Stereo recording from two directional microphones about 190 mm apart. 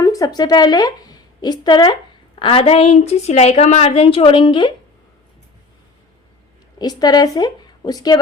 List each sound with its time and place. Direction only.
0.0 s a woman's voice: 20° left (ahead or behind)
6.7 s a woman's voice: 20° left (ahead or behind)